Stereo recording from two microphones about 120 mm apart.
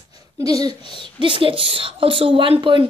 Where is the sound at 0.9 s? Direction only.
40° right (ahead or behind).